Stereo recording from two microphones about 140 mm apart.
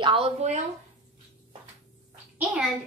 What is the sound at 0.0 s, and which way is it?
Speech, 40° right (ahead or behind).